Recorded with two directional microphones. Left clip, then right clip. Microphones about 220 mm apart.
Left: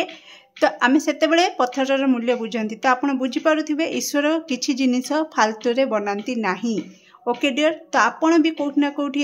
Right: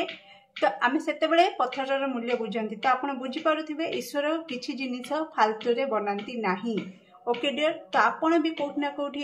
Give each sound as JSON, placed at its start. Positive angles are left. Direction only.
{"t": 0.6, "sound": "speech", "side_deg": 45}